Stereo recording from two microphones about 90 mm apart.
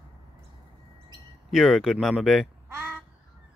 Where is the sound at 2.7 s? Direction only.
25° right (ahead or behind).